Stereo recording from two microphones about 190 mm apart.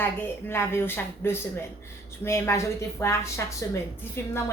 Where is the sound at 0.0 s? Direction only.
10° left (ahead or behind).